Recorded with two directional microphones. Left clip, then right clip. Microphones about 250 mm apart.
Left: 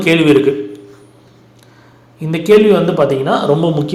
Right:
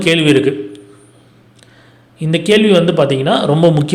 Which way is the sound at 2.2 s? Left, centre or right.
Right.